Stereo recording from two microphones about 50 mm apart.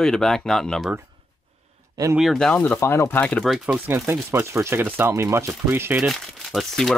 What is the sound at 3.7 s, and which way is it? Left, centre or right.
Speech, right.